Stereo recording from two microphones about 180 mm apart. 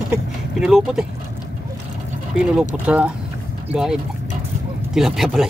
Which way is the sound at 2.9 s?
5° right (ahead or behind).